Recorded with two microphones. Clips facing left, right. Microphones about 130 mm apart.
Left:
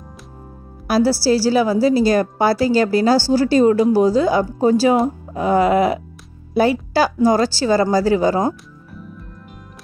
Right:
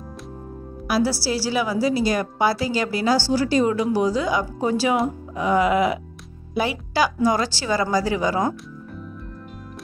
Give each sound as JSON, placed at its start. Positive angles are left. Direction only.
{"t": 0.8, "sound": "a woman's voice", "side_deg": 35}